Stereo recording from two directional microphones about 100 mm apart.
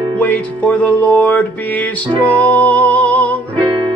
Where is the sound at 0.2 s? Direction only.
15° left (ahead or behind).